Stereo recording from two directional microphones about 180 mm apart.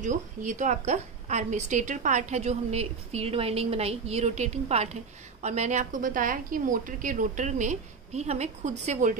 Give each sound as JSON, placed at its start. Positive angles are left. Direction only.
{"t": 0.0, "sound": "a woman's voice", "side_deg": -45}